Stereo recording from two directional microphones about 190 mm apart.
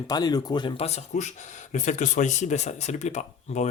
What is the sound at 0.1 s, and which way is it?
Speech, 20° left (ahead or behind).